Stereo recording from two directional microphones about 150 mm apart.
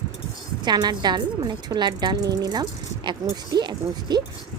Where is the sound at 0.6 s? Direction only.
30° right (ahead or behind).